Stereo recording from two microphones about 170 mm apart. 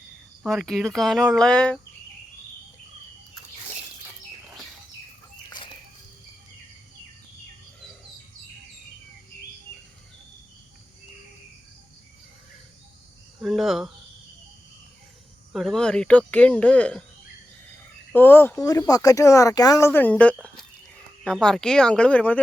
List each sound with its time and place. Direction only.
0.4 s speech: centre (ahead or behind)
13.4 s speech: centre (ahead or behind)
15.5 s speech: centre (ahead or behind)
18.1 s speech: 10° left (ahead or behind)